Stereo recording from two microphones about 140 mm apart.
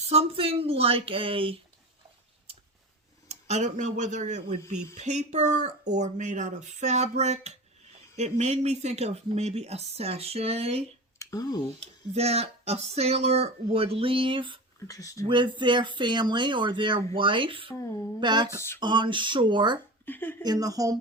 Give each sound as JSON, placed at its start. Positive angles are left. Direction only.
{"t": 0.0, "sound": "speech", "side_deg": -45}
{"t": 3.2, "sound": "speech", "side_deg": -55}
{"t": 11.2, "sound": "speech", "side_deg": 25}
{"t": 11.8, "sound": "speech", "side_deg": -50}
{"t": 14.8, "sound": "speech", "side_deg": 25}
{"t": 15.3, "sound": "speech", "side_deg": -35}
{"t": 20.1, "sound": "speech", "side_deg": 15}
{"t": 20.4, "sound": "speech", "side_deg": -25}